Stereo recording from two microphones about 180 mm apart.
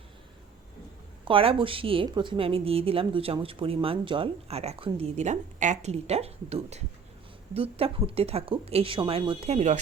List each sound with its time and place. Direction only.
1.2 s a woman's voice: 30° right (ahead or behind)